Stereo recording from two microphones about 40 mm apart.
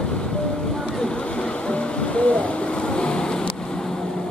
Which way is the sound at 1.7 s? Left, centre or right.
Left.